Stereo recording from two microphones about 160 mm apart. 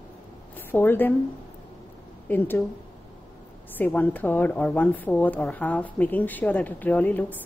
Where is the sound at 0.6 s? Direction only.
15° left (ahead or behind).